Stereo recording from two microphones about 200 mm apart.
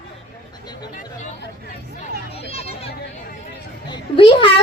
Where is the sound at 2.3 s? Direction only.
30° left (ahead or behind).